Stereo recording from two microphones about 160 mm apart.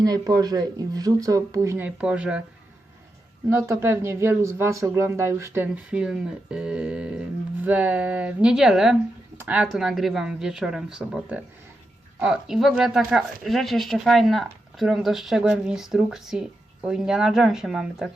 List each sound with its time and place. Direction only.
0.0 s speech: 25° right (ahead or behind); by 2.4 s 5° right (ahead or behind)
3.5 s speech: 15° right (ahead or behind)